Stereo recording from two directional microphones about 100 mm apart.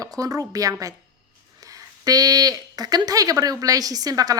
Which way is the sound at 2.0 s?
40° right (ahead or behind).